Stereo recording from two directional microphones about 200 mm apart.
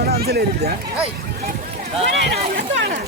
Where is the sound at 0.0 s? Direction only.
50° right (ahead or behind).